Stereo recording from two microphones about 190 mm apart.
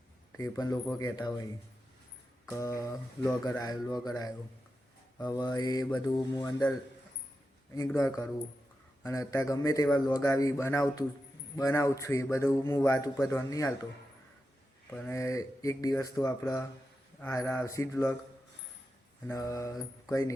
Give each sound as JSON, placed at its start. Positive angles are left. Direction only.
{"t": 0.3, "sound": "a man's voice", "side_deg": 15}
{"t": 2.5, "sound": "a man's voice", "side_deg": 15}
{"t": 7.9, "sound": "a man's voice", "side_deg": 15}
{"t": 14.8, "sound": "a man's voice", "side_deg": 10}
{"t": 19.3, "sound": "a man's voice", "side_deg": 15}